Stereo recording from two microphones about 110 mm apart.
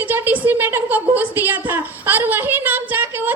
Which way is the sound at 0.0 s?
15° right (ahead or behind).